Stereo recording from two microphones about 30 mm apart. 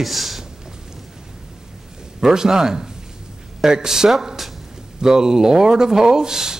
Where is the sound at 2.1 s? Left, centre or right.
Centre.